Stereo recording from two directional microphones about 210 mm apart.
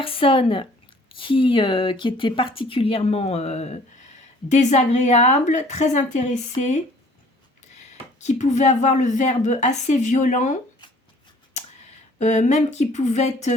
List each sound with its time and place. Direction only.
0.0 s a woman's voice: 25° left (ahead or behind)
8.2 s speech: 35° left (ahead or behind)
11.6 s a sound: 35° left (ahead or behind)
12.2 s speech: 35° left (ahead or behind)